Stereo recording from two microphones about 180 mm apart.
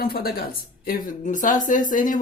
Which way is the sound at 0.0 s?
55° left (ahead or behind).